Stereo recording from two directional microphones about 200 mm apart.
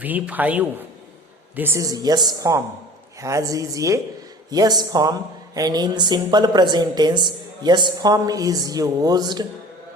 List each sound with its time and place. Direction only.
0.0 s a woman's voice: 10° right (ahead or behind)